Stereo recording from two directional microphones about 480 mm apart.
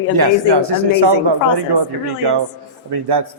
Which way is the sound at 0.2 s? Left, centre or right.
Right.